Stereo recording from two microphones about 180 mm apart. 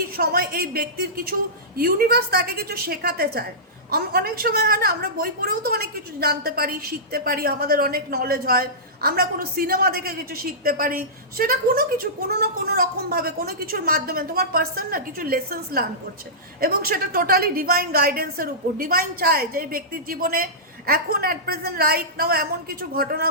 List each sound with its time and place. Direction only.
0.2 s a woman's voice: 60° right (ahead or behind)